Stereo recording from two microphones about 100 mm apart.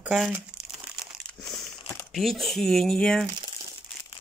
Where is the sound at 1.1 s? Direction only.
Centre (ahead or behind).